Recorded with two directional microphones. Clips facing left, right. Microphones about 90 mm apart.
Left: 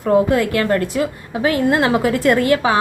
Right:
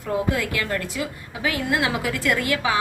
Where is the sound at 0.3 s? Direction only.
50° left (ahead or behind).